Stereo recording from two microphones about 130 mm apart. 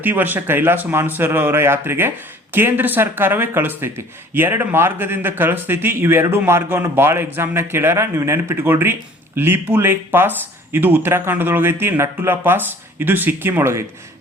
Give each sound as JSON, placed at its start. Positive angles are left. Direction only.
{"t": 0.0, "sound": "speech", "side_deg": -15}